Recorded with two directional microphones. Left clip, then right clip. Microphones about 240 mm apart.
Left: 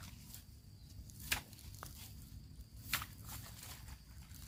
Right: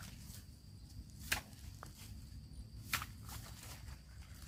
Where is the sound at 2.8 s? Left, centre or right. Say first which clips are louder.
Even; left.